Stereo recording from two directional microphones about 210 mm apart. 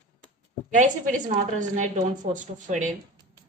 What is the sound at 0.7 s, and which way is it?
A woman's voice, 35° right (ahead or behind).